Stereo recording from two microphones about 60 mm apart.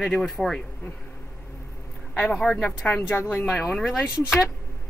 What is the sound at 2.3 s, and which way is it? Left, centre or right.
Speech, centre.